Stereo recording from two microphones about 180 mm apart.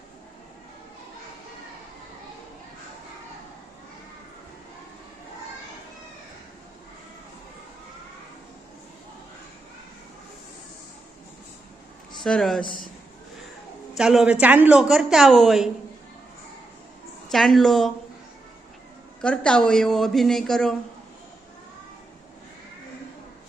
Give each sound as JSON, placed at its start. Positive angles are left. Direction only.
{"t": 12.2, "sound": "a woman's voice", "side_deg": 0}
{"t": 12.6, "sound": "a man's voice", "side_deg": 50}
{"t": 13.9, "sound": "a woman's voice", "side_deg": 0}
{"t": 17.3, "sound": "a woman's voice", "side_deg": 0}
{"t": 19.2, "sound": "a woman's voice", "side_deg": 5}